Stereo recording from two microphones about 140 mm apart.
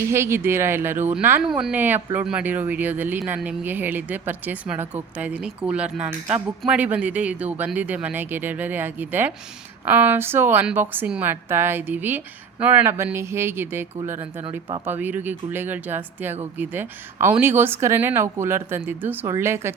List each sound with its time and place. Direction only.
0.0 s speech: 20° right (ahead or behind)